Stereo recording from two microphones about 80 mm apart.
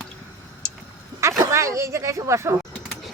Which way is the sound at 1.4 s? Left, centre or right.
Right.